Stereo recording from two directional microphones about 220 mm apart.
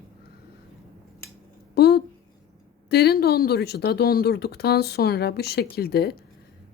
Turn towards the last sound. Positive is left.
turn(degrees=45)  # may be behind; listen again after turning